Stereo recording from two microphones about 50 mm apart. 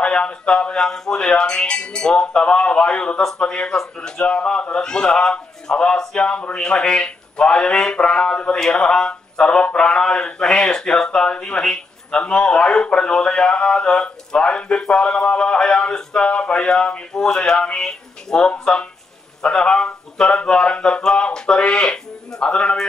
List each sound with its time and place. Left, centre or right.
0.0 s speech: left
0.7 s a man's voice: centre
3.2 s a man's voice: centre